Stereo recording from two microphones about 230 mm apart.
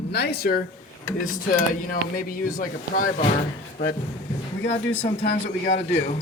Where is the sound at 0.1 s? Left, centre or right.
Left.